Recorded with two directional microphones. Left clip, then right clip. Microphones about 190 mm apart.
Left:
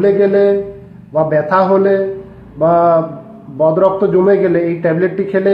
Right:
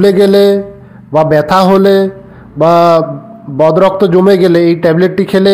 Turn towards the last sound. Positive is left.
turn(degrees=-40)  # may be behind; listen again after turning